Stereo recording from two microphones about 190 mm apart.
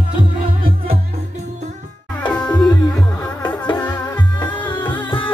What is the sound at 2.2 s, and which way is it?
Music, 5° left (ahead or behind).